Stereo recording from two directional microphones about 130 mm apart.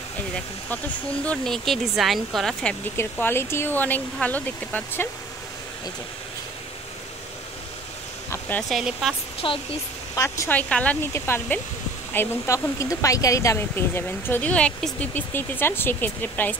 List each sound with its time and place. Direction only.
0.7 s speech: 10° left (ahead or behind)
3.0 s speech: 15° left (ahead or behind)
8.3 s a sound: 15° left (ahead or behind)
8.6 s speech: centre (ahead or behind)
9.4 s speech: 40° left (ahead or behind)
10.1 s speech: 25° left (ahead or behind)
10.5 s speech: 10° left (ahead or behind)